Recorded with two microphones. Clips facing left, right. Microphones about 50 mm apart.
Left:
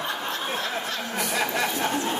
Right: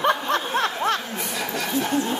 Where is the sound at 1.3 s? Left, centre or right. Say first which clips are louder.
Left 3 dB; left.